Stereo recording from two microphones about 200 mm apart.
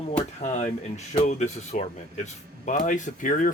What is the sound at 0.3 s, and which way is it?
Speech, 35° left (ahead or behind).